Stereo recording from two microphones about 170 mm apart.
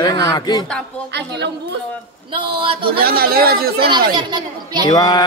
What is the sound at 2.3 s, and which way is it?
Speech, 30° right (ahead or behind).